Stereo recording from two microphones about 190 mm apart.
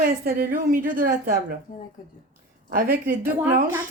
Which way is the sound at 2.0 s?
45° left (ahead or behind).